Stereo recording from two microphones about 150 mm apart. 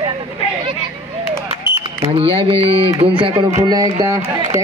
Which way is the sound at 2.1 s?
35° right (ahead or behind).